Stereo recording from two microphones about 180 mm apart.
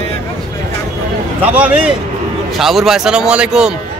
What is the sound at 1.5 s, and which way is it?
A man's voice, 10° right (ahead or behind).